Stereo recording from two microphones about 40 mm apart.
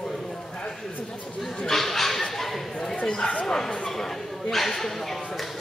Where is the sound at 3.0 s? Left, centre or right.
Centre.